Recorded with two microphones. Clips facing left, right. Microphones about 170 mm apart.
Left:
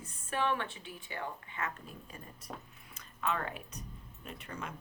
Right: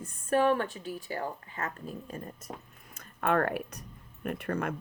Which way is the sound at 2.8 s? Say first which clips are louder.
Right 6 dB; 50° right (ahead or behind).